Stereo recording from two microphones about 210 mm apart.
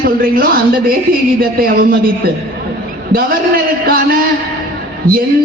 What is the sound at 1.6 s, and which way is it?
Speech, 45° right (ahead or behind).